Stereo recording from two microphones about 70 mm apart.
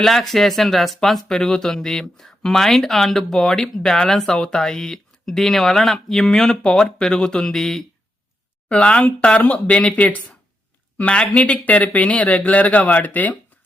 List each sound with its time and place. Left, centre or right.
0.0 s speech: centre
8.7 s speech: centre